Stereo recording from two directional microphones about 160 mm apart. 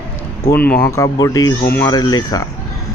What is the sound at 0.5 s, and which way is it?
Speech, 10° left (ahead or behind).